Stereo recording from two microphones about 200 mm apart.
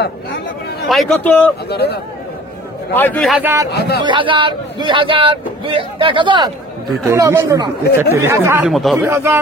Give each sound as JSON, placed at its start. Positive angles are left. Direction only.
{"t": 0.0, "sound": "speech", "side_deg": 55}
{"t": 0.8, "sound": "a man's voice", "side_deg": 5}
{"t": 1.7, "sound": "speech", "side_deg": 55}
{"t": 2.9, "sound": "a man's voice", "side_deg": 10}
{"t": 3.7, "sound": "speech", "side_deg": 55}
{"t": 4.0, "sound": "speech", "side_deg": -25}
{"t": 9.1, "sound": "speech", "side_deg": -15}